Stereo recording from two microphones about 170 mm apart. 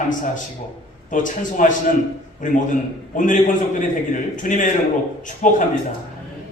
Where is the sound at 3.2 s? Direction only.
50° left (ahead or behind).